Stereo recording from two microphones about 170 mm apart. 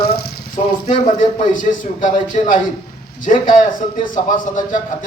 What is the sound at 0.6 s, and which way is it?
A man's voice, 40° left (ahead or behind).